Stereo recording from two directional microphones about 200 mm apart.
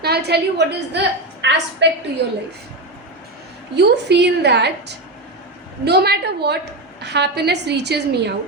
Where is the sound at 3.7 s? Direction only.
55° right (ahead or behind).